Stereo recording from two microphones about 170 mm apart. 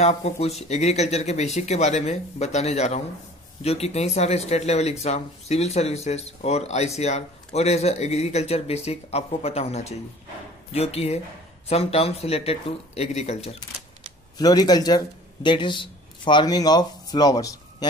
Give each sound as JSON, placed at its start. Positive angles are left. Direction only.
{"t": 0.0, "sound": "speech", "side_deg": 40}
{"t": 14.4, "sound": "speech", "side_deg": 25}